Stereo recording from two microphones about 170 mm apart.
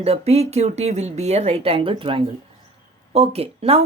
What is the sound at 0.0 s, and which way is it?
A woman's voice, 35° right (ahead or behind).